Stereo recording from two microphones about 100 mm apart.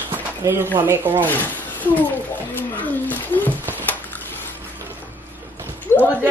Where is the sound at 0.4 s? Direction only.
25° right (ahead or behind).